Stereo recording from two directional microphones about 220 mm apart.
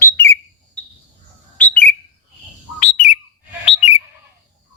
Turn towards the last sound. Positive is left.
turn(degrees=25)  # may be behind; listen again after turning